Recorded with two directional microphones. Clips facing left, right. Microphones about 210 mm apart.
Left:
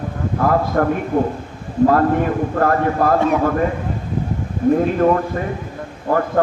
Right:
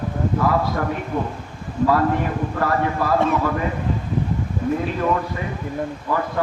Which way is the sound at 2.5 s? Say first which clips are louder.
Left 4 dB; 50° left (ahead or behind).